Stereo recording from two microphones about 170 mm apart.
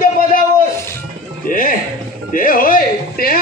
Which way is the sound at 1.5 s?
50° left (ahead or behind).